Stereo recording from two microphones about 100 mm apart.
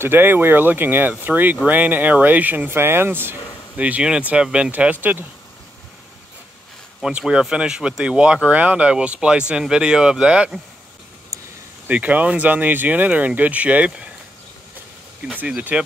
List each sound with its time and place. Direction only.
0.0 s speech: 20° right (ahead or behind)
7.0 s speech: 10° right (ahead or behind)
11.9 s speech: 15° right (ahead or behind)
15.3 s speech: 15° right (ahead or behind)